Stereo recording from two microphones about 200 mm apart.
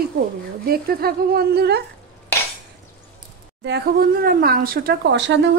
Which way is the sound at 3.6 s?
50° right (ahead or behind).